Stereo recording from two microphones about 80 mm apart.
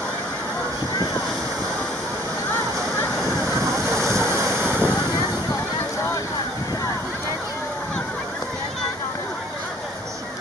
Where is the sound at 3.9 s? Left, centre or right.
Right.